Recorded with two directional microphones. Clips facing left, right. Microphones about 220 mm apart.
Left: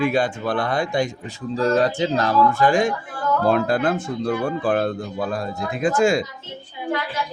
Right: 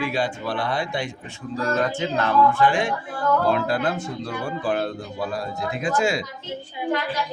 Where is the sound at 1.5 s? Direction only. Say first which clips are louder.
Left 5 dB; 30° left (ahead or behind); by 6.2 s 50° left (ahead or behind).